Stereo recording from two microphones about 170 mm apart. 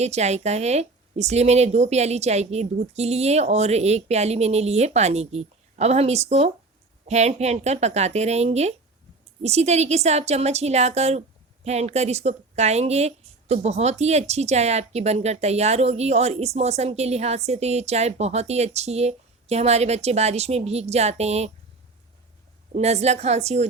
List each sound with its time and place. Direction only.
0.0 s speech: 40° right (ahead or behind)
22.7 s speech: 40° right (ahead or behind)